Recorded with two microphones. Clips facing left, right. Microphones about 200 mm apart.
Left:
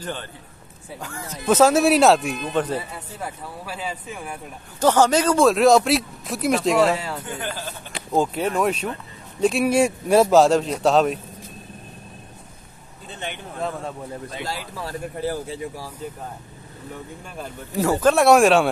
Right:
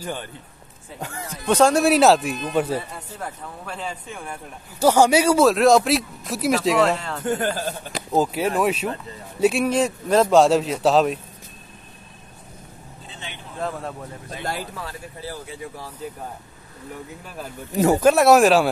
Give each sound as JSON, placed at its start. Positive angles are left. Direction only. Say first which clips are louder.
{"t": 0.0, "sound": "speech", "louder": "right 1 dB", "side_deg": -10}
{"t": 0.9, "sound": "speech", "louder": "right 1 dB", "side_deg": -20}
{"t": 1.4, "sound": "speech", "louder": "left 1 dB", "side_deg": 5}
{"t": 2.8, "sound": "speech", "louder": "left 1 dB", "side_deg": 5}
{"t": 4.7, "sound": "speech", "louder": "right 1 dB", "side_deg": -10}
{"t": 7.2, "sound": "a man's voice", "louder": "right 7 dB", "side_deg": -45}
{"t": 8.1, "sound": "speech", "louder": "right 1 dB", "side_deg": -5}
{"t": 9.7, "sound": "speech", "louder": "left 2 dB", "side_deg": 10}
{"t": 13.6, "sound": "speech", "louder": "even", "side_deg": 0}
{"t": 14.4, "sound": "speech", "louder": "right 4 dB", "side_deg": -55}
{"t": 14.9, "sound": "speech", "louder": "left 8 dB", "side_deg": 50}
{"t": 17.7, "sound": "speech", "louder": "right 2 dB", "side_deg": -15}
{"t": 18.1, "sound": "speech", "louder": "left 3 dB", "side_deg": 0}